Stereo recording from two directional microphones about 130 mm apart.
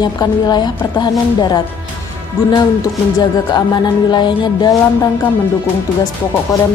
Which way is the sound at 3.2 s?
35° left (ahead or behind).